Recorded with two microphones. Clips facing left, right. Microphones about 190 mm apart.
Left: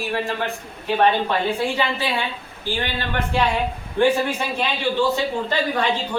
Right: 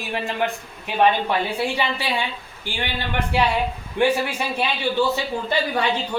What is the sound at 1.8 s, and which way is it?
Speech, 15° right (ahead or behind).